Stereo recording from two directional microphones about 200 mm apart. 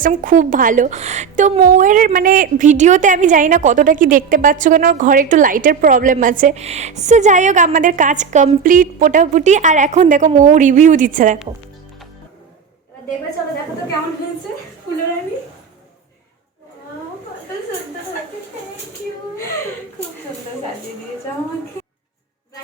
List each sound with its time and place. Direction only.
0.0 s a woman's voice: 40° right (ahead or behind)